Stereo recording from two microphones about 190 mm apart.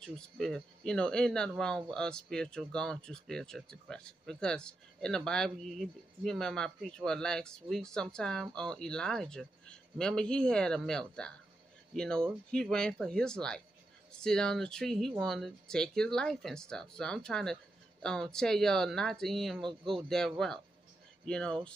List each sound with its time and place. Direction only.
0.0 s speech: 5° left (ahead or behind)